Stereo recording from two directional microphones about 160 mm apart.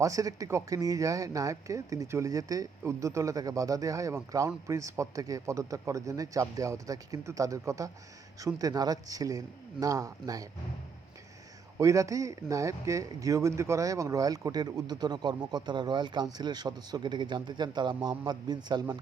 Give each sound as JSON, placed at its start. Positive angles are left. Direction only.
{"t": 0.0, "sound": "speech", "side_deg": -20}
{"t": 11.8, "sound": "speech", "side_deg": -20}